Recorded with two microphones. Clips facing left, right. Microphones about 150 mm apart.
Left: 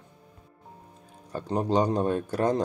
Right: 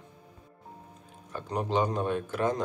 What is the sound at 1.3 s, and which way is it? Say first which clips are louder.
Speech: left 4 dB; 35° left (ahead or behind).